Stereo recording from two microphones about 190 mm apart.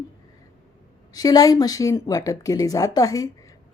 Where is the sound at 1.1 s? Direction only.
20° left (ahead or behind).